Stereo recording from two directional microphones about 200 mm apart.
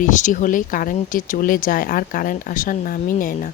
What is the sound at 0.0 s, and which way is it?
Speech, 40° left (ahead or behind).